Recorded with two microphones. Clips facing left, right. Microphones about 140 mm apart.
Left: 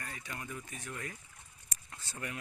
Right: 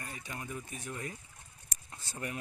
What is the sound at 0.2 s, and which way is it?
Speech, 15° right (ahead or behind).